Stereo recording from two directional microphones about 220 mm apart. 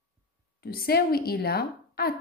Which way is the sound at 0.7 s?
45° left (ahead or behind).